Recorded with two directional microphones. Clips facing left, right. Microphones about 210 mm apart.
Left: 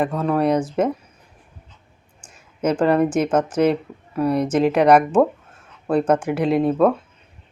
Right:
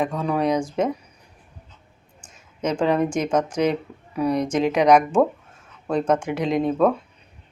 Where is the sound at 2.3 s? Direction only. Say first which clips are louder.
Left 4 dB; 10° left (ahead or behind).